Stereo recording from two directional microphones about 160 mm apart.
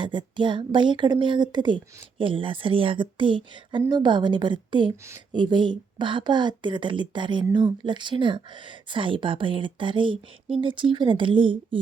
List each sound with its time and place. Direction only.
0.0 s speech: 30° right (ahead or behind)